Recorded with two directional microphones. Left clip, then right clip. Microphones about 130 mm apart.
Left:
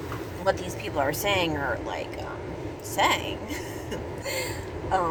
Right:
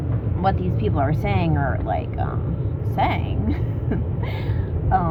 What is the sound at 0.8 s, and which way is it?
Speech, 20° right (ahead or behind).